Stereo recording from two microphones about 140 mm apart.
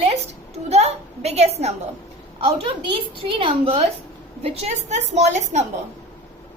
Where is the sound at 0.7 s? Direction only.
50° right (ahead or behind).